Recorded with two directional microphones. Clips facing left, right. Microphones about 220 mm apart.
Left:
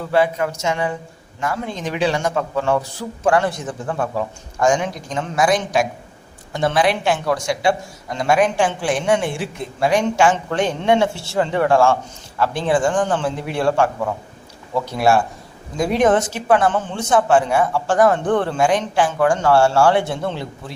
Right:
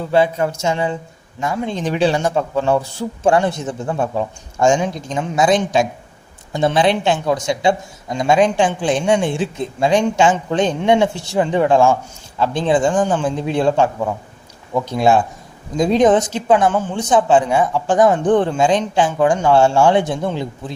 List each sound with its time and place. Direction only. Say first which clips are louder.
0.1 s speech: right 2 dB; 25° right (ahead or behind)
1.7 s speech: right 4 dB; 35° right (ahead or behind); by 20.7 s 15° right (ahead or behind)